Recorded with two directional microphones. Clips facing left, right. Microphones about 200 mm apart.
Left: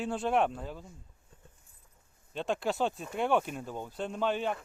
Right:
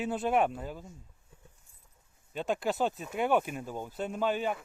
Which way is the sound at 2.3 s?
5° right (ahead or behind).